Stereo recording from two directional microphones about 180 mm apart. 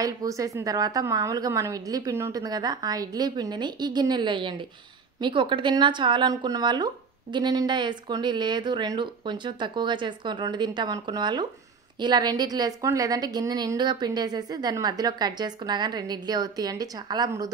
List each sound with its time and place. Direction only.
0.0 s speech: 20° right (ahead or behind)